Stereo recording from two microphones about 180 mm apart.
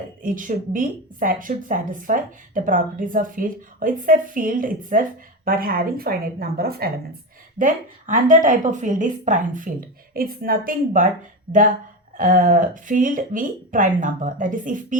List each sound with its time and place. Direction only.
0.2 s a woman's voice: 50° right (ahead or behind)
7.6 s a woman's voice: 45° right (ahead or behind)
12.1 s a woman's voice: 45° right (ahead or behind)